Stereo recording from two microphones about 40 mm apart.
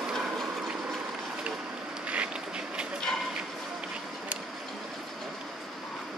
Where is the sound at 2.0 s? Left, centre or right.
Right.